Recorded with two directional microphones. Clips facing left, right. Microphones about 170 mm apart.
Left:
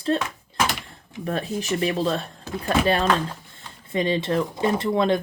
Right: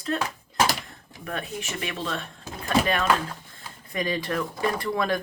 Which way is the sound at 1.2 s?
35° left (ahead or behind).